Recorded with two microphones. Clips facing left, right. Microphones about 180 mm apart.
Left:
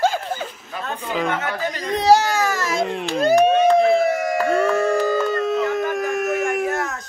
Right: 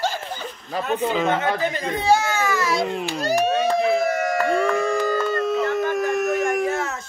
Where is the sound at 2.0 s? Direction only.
35° left (ahead or behind).